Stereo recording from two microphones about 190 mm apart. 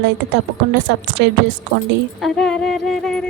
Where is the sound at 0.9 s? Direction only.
65° right (ahead or behind).